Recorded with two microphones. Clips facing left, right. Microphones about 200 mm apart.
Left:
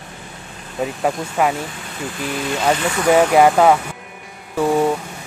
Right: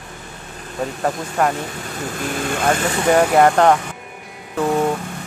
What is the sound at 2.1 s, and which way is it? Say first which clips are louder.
Speech: even; 50° right (ahead or behind).